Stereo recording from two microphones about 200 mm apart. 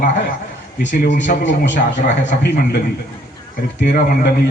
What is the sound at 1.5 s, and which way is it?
A man's voice, 65° left (ahead or behind).